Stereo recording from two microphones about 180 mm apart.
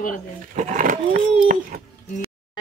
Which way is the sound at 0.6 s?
45° right (ahead or behind).